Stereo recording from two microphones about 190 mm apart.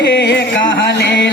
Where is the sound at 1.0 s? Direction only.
65° left (ahead or behind).